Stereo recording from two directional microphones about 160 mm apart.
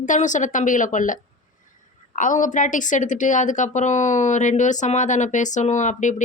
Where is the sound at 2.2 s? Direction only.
55° left (ahead or behind).